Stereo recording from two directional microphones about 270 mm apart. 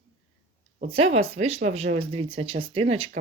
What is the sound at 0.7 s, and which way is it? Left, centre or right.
Speech, right.